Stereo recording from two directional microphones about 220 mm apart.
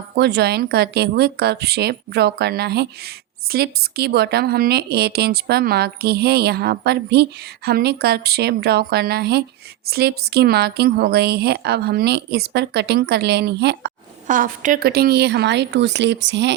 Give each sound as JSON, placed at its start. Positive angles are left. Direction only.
{"t": 0.2, "sound": "speech", "side_deg": -45}
{"t": 14.3, "sound": "speech", "side_deg": -35}